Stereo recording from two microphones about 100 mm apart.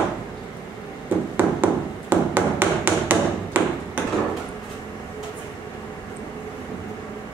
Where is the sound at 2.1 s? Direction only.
20° right (ahead or behind).